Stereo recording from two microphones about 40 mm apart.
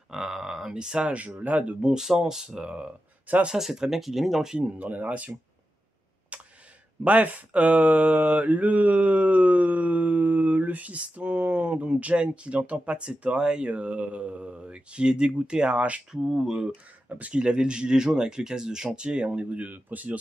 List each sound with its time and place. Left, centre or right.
0.1 s a sound: centre
0.7 s speech: centre
1.1 s mantra: right
1.8 s speech: right
3.5 s speech: centre
4.7 s mantra: right
6.3 s a sound: right
7.1 s mantra: right
13.7 s speech: right
16.3 s speech: centre; by 19.7 s right
19.7 s speech: right